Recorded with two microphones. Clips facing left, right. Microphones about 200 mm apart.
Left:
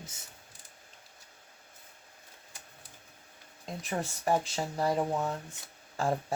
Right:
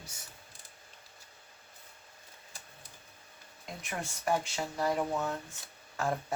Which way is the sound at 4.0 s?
35° left (ahead or behind).